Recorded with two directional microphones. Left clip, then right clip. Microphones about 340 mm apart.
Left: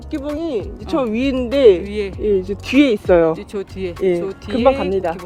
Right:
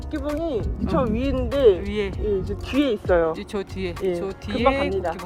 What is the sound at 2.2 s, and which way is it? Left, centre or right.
Speech, left.